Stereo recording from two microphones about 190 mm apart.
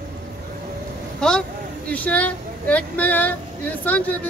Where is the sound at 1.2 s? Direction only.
5° left (ahead or behind).